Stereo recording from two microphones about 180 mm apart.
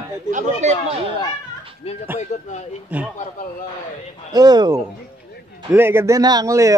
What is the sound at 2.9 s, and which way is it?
Speech, 10° right (ahead or behind).